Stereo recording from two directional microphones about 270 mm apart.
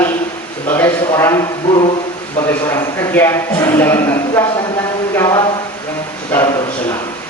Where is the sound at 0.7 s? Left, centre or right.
Centre.